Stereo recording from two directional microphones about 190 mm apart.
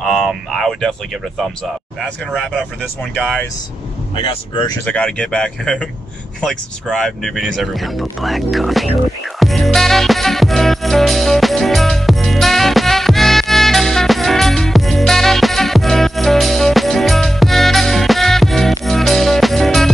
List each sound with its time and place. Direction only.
0.0 s a sound: centre (ahead or behind)
2.0 s speech: centre (ahead or behind)
4.1 s speech: 30° left (ahead or behind)
4.8 s speech: 5° left (ahead or behind)
9.4 s music: centre (ahead or behind)